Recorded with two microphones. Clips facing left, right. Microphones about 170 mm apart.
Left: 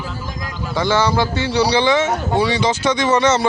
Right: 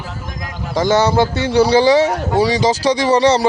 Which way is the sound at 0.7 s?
45° right (ahead or behind).